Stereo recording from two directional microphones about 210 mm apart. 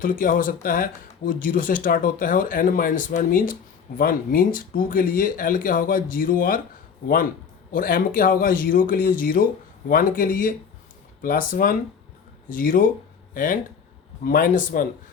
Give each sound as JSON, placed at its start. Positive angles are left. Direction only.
{"t": 0.0, "sound": "speech", "side_deg": 40}
{"t": 7.7, "sound": "speech", "side_deg": 40}